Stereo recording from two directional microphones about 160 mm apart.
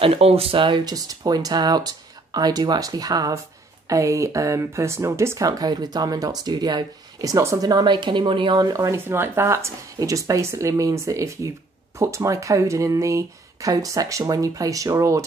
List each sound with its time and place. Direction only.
0.0 s speech: 40° right (ahead or behind); by 15.2 s 20° right (ahead or behind)